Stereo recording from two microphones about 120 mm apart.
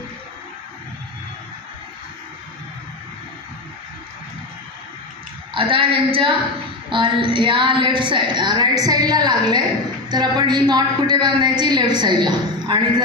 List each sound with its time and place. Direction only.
5.5 s female singing: 45° right (ahead or behind)
6.9 s a woman's voice: 45° right (ahead or behind)